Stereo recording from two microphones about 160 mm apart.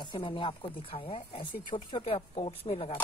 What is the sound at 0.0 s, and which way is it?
Speech, 30° left (ahead or behind).